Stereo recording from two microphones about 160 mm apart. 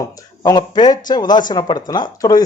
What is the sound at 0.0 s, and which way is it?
A man's voice, 25° left (ahead or behind).